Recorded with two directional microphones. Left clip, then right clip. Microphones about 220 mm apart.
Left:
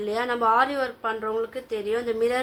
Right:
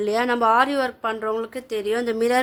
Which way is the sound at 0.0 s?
50° right (ahead or behind).